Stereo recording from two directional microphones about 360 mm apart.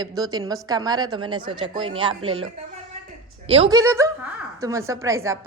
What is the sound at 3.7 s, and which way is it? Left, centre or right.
A man's voice, centre.